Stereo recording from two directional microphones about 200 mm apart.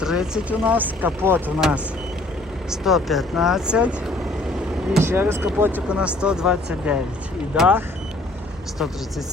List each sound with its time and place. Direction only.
0.0 s speech: 5° right (ahead or behind)